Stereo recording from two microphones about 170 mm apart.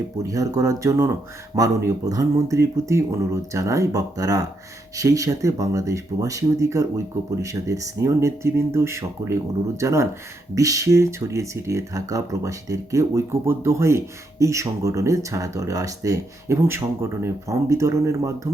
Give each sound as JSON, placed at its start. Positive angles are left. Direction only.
{"t": 0.2, "sound": "speech", "side_deg": -20}